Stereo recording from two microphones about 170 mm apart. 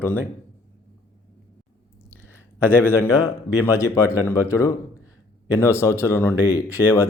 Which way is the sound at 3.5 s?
10° left (ahead or behind).